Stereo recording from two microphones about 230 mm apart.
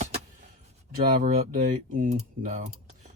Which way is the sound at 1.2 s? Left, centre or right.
Right.